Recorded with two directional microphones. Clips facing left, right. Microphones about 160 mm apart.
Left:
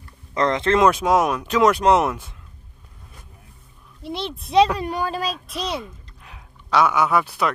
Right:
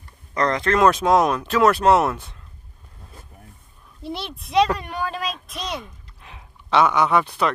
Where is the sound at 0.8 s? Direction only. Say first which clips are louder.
Right 4 dB; 10° left (ahead or behind).